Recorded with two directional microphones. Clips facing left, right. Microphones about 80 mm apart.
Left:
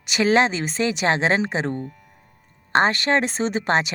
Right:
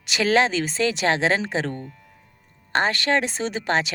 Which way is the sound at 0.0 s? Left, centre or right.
Left.